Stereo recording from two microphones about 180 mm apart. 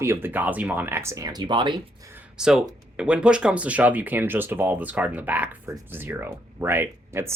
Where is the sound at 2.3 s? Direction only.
5° right (ahead or behind).